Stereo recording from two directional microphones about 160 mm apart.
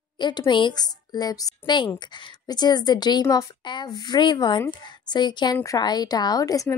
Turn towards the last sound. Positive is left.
turn(degrees=20)  # may be behind; listen again after turning